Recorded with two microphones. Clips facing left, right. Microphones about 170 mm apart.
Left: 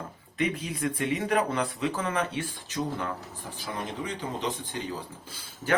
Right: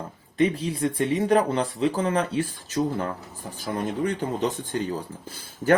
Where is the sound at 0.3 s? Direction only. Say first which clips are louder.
Right 7 dB; 30° right (ahead or behind).